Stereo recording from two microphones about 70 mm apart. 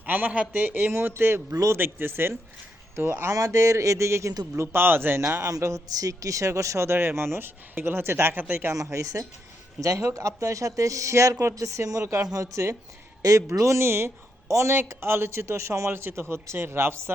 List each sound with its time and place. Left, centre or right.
0.0 s speech: right
1.8 s speech: right
3.3 s speech: right
5.5 s speech: right
8.7 s speech: right